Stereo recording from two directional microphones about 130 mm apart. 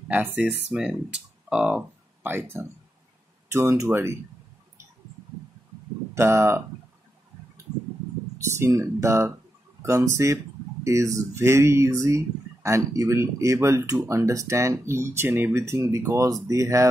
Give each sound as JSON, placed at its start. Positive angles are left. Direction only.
{"t": 0.1, "sound": "speech", "side_deg": -15}
{"t": 6.1, "sound": "speech", "side_deg": -20}
{"t": 8.5, "sound": "speech", "side_deg": -25}